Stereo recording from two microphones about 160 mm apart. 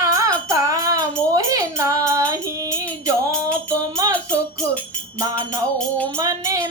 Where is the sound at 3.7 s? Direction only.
20° right (ahead or behind).